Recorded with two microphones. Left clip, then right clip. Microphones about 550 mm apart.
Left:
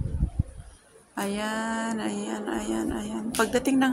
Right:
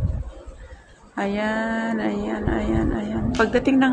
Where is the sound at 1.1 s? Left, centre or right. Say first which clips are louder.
Right 6 dB; left.